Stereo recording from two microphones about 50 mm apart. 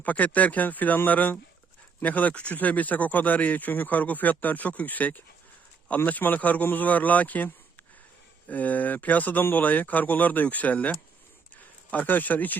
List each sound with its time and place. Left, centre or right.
0.0 s speech: left